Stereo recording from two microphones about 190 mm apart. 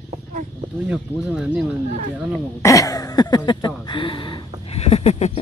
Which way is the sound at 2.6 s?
15° left (ahead or behind).